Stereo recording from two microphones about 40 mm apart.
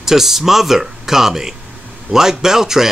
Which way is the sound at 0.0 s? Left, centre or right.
Centre.